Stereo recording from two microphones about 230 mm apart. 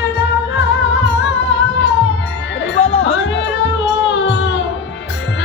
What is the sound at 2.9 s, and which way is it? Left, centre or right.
Music, left.